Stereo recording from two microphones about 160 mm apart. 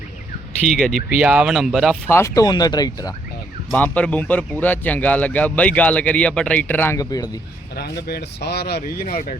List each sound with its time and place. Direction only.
0.7 s speech: centre (ahead or behind)
2.0 s speech: 15° left (ahead or behind)
3.7 s speech: 10° left (ahead or behind)
7.8 s speech: 80° left
9.1 s speech: 50° left (ahead or behind)